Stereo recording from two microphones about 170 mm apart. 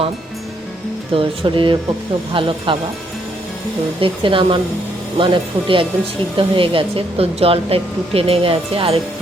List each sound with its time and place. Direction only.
1.1 s speech: 30° right (ahead or behind)
4.0 s speech: 30° right (ahead or behind)